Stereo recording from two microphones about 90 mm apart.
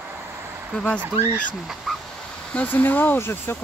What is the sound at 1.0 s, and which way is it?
Speech, 20° right (ahead or behind).